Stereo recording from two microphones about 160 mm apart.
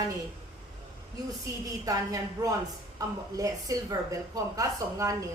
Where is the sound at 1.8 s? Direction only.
20° right (ahead or behind).